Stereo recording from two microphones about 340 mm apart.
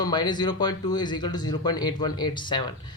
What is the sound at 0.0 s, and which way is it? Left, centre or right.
Speech, centre.